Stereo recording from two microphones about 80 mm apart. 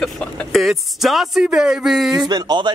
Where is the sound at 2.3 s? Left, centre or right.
Right.